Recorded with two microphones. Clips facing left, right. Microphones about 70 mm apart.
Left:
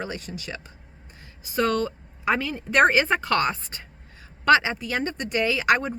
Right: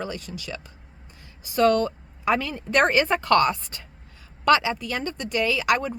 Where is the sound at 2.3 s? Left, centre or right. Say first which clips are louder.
Right 1 dB; left.